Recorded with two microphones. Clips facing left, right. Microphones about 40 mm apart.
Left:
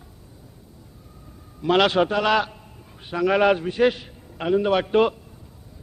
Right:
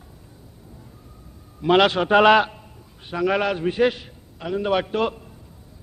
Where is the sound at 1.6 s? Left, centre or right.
Centre.